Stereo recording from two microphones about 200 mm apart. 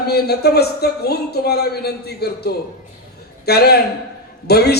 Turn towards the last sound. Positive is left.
turn(degrees=55)  # may be behind; listen again after turning